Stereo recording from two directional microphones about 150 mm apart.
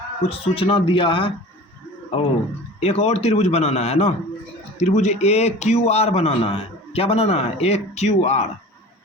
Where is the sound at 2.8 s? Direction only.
45° left (ahead or behind).